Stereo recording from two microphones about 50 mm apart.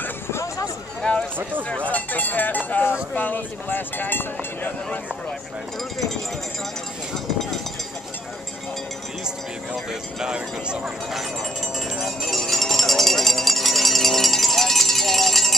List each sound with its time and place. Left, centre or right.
0.3 s hubbub: left
1.9 s speech: left
10.2 s speech: centre
12.0 s cowbell: centre